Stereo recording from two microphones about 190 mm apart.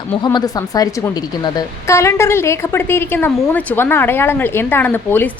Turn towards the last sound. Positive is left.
turn(degrees=10)  # may be behind; listen again after turning